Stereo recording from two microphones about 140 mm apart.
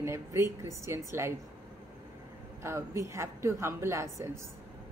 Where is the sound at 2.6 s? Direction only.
20° right (ahead or behind).